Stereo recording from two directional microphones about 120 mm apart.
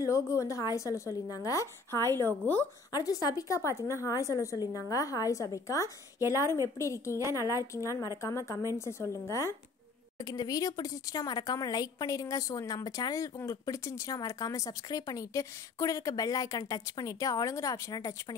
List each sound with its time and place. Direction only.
0.0 s speech: 25° left (ahead or behind)
2.9 s speech: 30° left (ahead or behind)
7.2 s a woman's voice: 25° right (ahead or behind)
7.7 s speech: 25° left (ahead or behind)